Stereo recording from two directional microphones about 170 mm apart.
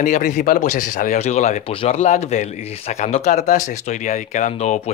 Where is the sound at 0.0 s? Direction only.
50° left (ahead or behind).